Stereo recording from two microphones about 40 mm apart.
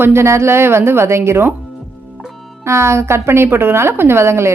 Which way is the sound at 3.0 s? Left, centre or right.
Right.